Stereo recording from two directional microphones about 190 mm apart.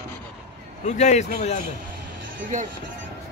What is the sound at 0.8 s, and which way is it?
Speech, 40° left (ahead or behind).